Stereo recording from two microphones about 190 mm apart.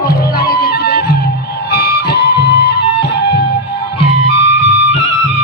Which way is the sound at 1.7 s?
60° left (ahead or behind).